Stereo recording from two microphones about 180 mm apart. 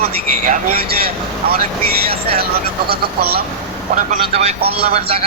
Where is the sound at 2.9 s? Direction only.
60° right (ahead or behind).